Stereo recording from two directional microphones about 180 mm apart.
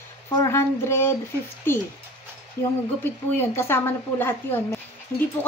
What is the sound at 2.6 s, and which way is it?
Speech, 15° left (ahead or behind).